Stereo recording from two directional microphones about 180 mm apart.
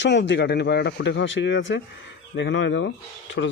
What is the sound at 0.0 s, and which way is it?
Speech, 85° left.